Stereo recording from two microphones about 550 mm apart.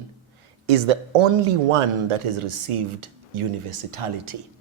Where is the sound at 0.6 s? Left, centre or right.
Right.